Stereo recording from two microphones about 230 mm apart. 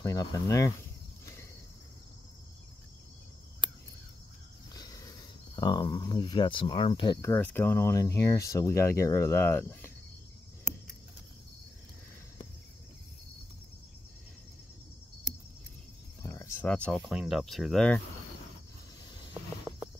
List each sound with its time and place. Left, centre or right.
0.0 s speech: centre
4.7 s a sound: centre
5.6 s speech: centre
16.2 s speech: centre